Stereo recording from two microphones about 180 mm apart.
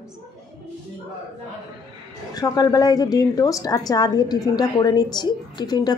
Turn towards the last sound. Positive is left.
turn(degrees=20)  # may be behind; listen again after turning